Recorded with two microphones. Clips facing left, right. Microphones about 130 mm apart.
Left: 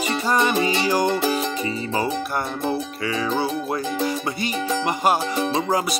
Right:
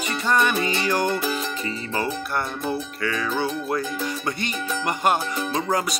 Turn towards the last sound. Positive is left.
turn(degrees=10)  # may be behind; listen again after turning